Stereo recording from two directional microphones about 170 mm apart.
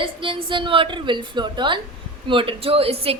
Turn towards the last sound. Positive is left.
turn(degrees=-35)  # may be behind; listen again after turning